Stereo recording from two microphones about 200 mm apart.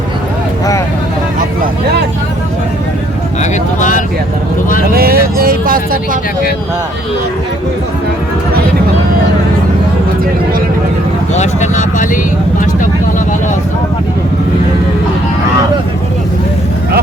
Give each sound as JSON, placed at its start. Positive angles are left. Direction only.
{"t": 3.8, "sound": "speech", "side_deg": 40}
{"t": 4.9, "sound": "speech", "side_deg": -50}
{"t": 11.3, "sound": "vehicle", "side_deg": 35}